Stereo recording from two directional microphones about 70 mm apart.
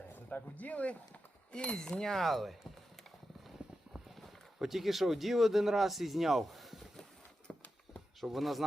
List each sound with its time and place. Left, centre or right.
0.1 s speech: left; by 2.6 s centre
3.6 s clip-clop: centre
4.2 s speech: centre
8.2 s speech: centre